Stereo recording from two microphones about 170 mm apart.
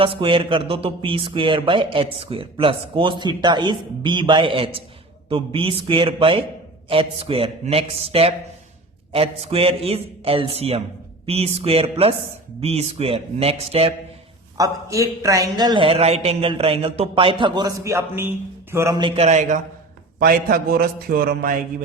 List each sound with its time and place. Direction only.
0.0 s a man's voice: 30° right (ahead or behind)
14.6 s a man's voice: 20° right (ahead or behind)
19.2 s a man's voice: 45° right (ahead or behind)
20.1 s a man's voice: 55° right (ahead or behind)